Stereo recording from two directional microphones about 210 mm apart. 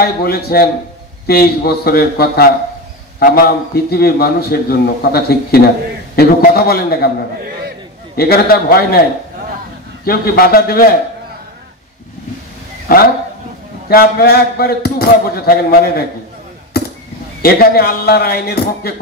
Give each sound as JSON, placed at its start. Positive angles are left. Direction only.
{"t": 0.0, "sound": "a man's voice", "side_deg": 45}
{"t": 8.2, "sound": "a man's voice", "side_deg": 45}
{"t": 10.0, "sound": "a man's voice", "side_deg": 45}
{"t": 12.8, "sound": "a man's voice", "side_deg": 45}
{"t": 17.4, "sound": "a man's voice", "side_deg": 45}